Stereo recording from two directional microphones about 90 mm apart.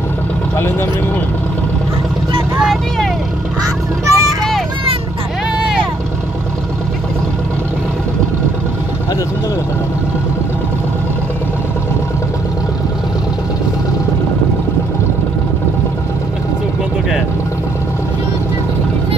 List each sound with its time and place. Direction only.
2.6 s speech: centre (ahead or behind)
3.6 s honk: 40° right (ahead or behind)